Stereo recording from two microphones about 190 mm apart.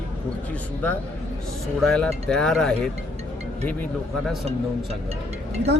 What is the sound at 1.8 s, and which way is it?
A man's voice, 5° left (ahead or behind).